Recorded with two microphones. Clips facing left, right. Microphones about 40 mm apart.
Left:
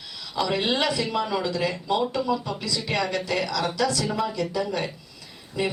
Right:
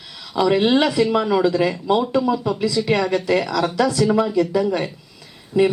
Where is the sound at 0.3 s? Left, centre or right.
Centre.